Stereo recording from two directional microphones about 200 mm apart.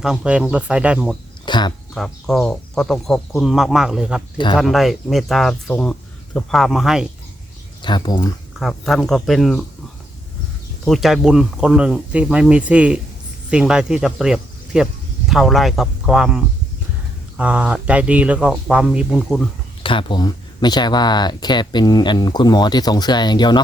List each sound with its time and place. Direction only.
0.0 s speech: centre (ahead or behind)
1.5 s speech: 20° left (ahead or behind)
2.0 s speech: centre (ahead or behind)
7.8 s speech: 20° left (ahead or behind)
8.5 s speech: centre (ahead or behind)
10.8 s speech: centre (ahead or behind)
19.8 s speech: 25° left (ahead or behind)